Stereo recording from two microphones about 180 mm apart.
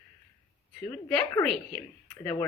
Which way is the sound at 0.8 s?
5° left (ahead or behind).